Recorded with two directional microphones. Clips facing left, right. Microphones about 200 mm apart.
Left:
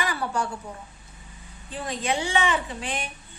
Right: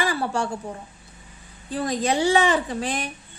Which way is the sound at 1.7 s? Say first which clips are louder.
Right 5 dB; 40° right (ahead or behind).